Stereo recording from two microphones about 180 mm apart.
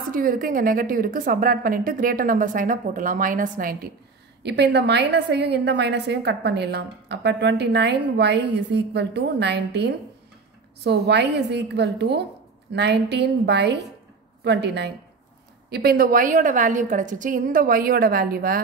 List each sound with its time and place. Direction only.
0.1 s a woman's voice: 50° right (ahead or behind)
4.4 s a woman's voice: 70° right (ahead or behind)
15.7 s a woman's voice: 60° right (ahead or behind)